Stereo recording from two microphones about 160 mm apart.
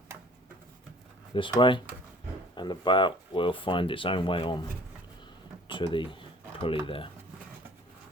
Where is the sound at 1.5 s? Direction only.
30° left (ahead or behind).